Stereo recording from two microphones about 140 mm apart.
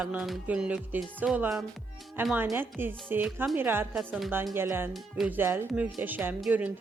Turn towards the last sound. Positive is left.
turn(degrees=-10)  # may be behind; listen again after turning